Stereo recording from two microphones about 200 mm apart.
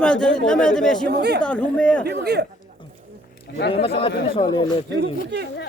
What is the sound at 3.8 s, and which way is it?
Speech, 30° left (ahead or behind).